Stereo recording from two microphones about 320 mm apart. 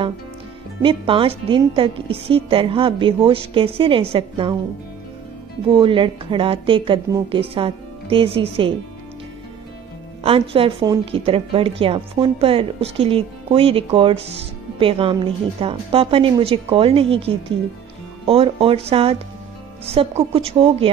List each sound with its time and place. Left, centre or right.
0.8 s a woman's voice: centre
5.7 s a woman's voice: centre
10.2 s a woman's voice: centre